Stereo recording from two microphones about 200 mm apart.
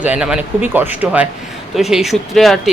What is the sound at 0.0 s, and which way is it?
A woman's voice, 5° right (ahead or behind).